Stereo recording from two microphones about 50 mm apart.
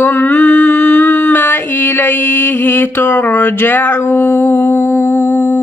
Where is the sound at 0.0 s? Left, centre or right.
Left.